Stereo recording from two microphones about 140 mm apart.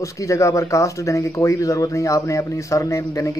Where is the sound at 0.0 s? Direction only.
20° left (ahead or behind).